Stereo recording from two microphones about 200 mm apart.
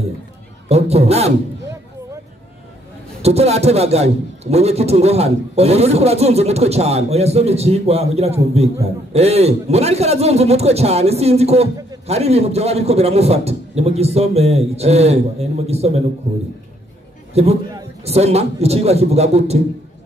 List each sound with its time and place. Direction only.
0.7 s a man's voice: 30° right (ahead or behind)
3.2 s a man's voice: 30° right (ahead or behind)
17.3 s a man's voice: 30° right (ahead or behind)